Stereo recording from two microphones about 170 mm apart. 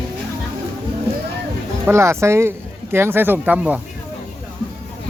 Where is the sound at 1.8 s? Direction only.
15° right (ahead or behind).